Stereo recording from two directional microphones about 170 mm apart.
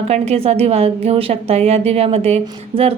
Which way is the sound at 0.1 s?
35° right (ahead or behind).